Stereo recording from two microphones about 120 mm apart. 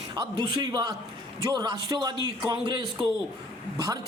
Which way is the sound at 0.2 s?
35° right (ahead or behind).